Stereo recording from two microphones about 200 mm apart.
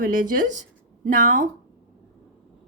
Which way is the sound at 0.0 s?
40° right (ahead or behind).